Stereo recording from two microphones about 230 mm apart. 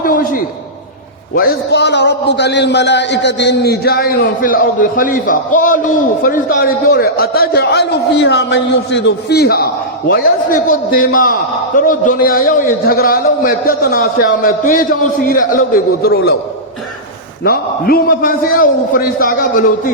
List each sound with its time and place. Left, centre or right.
0.0 s a sound: left
1.4 s a man's voice: left
17.4 s a man's voice: left